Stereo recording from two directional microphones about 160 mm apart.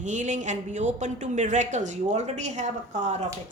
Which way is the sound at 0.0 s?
50° right (ahead or behind).